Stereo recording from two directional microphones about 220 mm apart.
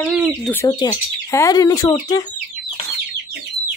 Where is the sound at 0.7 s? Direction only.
15° left (ahead or behind).